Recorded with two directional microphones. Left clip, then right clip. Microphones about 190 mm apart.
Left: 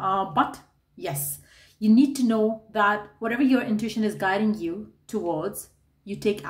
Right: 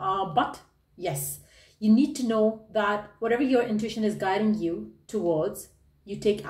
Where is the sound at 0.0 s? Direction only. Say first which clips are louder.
Left 2 dB; 45° left (ahead or behind).